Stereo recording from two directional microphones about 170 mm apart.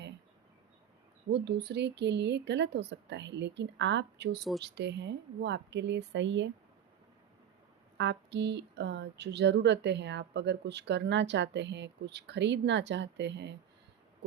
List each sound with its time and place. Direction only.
1.3 s speech: 75° right (ahead or behind)
7.9 s speech: 90° right